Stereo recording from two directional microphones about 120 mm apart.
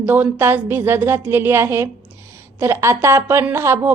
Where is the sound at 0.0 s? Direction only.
15° right (ahead or behind).